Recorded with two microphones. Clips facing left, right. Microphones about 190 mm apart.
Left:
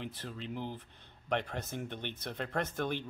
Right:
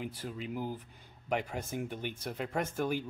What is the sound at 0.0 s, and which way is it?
Speech, 10° right (ahead or behind).